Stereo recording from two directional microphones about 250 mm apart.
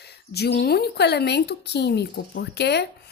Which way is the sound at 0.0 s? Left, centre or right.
Left.